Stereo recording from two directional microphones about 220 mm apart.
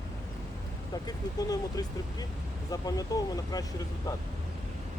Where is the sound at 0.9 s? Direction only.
15° left (ahead or behind).